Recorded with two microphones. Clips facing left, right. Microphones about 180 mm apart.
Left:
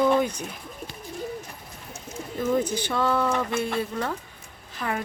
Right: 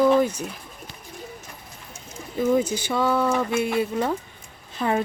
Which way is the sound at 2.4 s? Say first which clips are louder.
Right 3 dB; 10° right (ahead or behind).